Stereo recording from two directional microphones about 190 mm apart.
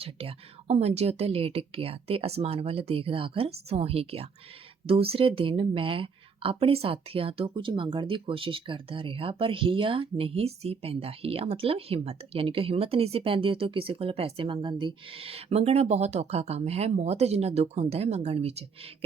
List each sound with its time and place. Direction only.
0.0 s a woman's voice: 30° right (ahead or behind)